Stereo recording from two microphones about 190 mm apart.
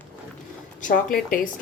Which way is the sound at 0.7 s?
45° left (ahead or behind).